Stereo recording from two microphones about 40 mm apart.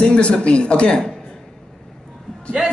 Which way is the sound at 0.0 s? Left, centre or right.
Left.